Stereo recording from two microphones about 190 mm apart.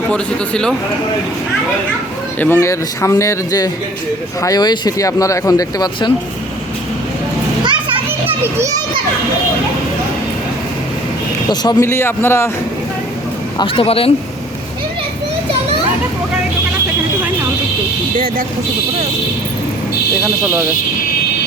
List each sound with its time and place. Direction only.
0.1 s a man's voice: 5° left (ahead or behind)
2.4 s a man's voice: 15° left (ahead or behind)
8.4 s a child's voice: 15° right (ahead or behind)
11.4 s a man's voice: 20° left (ahead or behind)
13.6 s speech: 30° left (ahead or behind)